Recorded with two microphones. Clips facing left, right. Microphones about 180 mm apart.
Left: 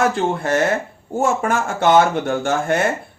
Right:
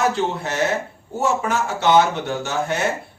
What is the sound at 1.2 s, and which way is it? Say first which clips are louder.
Speech: left 2 dB; 50° left (ahead or behind).